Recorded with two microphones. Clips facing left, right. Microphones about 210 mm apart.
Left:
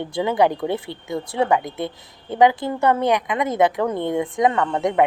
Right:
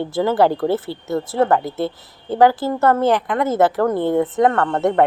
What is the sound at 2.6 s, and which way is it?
Speech, centre (ahead or behind).